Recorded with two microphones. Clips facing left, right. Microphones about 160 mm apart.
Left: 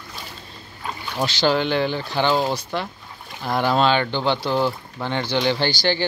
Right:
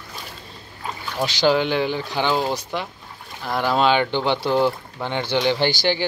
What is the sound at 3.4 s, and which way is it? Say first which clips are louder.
Speech: even; centre (ahead or behind).